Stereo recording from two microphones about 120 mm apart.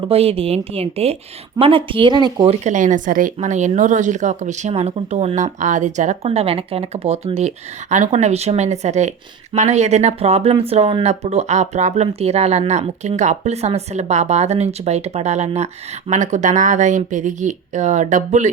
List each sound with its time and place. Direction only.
0.1 s speech: 55° right (ahead or behind); by 2.5 s 40° right (ahead or behind)
2.5 s speech: 85° right
4.7 s speech: 60° right (ahead or behind); by 6.1 s 90° right
6.2 s speech: 55° right (ahead or behind); by 18.5 s 85° right